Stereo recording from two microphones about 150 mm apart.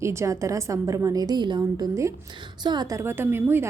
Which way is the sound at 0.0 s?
20° right (ahead or behind).